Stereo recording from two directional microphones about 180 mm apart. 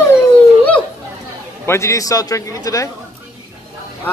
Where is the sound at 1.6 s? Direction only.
15° left (ahead or behind).